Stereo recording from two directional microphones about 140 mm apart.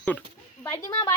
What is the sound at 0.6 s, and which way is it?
Speech, 20° left (ahead or behind).